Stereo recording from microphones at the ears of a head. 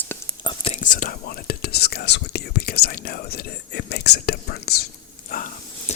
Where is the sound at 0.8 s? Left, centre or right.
Left.